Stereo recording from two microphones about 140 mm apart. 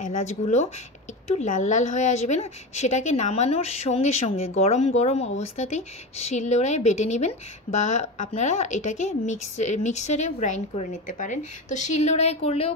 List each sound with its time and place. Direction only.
0.0 s a woman's voice: 60° left (ahead or behind)